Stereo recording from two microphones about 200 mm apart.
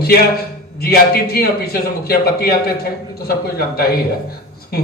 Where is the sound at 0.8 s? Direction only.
50° left (ahead or behind).